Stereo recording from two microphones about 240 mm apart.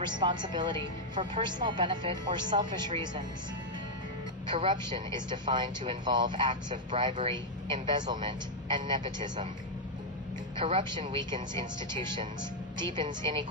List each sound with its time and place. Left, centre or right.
0.1 s speech: centre
4.4 s speech: centre
10.6 s speech: right